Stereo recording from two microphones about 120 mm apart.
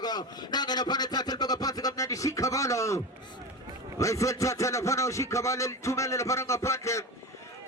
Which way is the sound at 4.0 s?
25° left (ahead or behind).